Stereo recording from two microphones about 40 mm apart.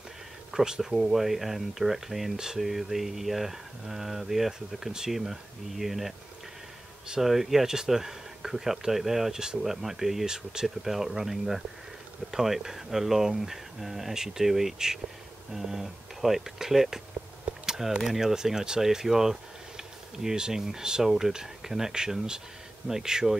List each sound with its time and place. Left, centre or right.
0.5 s speech: centre
7.2 s speech: centre
9.7 s speech: centre
19.8 s bee: centre
20.6 s speech: centre